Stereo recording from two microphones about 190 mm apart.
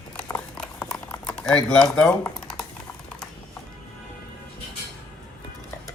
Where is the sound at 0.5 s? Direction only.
5° left (ahead or behind).